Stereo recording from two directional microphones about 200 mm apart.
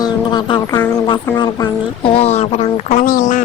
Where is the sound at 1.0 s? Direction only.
25° left (ahead or behind).